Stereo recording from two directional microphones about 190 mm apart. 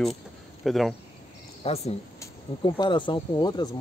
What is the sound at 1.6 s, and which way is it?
Speech, 35° left (ahead or behind).